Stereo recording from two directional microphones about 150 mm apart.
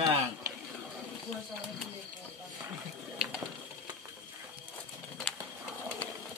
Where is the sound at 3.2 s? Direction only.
5° right (ahead or behind).